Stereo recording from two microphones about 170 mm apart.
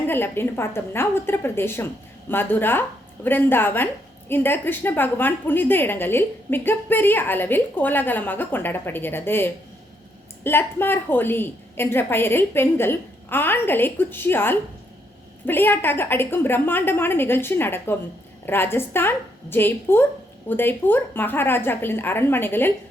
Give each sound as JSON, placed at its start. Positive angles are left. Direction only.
{"t": 0.1, "sound": "a woman's voice", "side_deg": 15}